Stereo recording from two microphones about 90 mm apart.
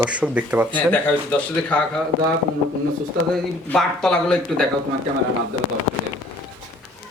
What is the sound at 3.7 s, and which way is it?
Speech, 5° left (ahead or behind).